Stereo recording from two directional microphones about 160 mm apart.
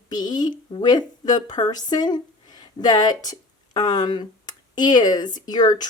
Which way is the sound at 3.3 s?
25° left (ahead or behind).